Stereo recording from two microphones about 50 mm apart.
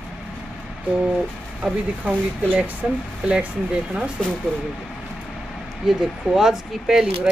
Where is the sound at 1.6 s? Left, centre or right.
Centre.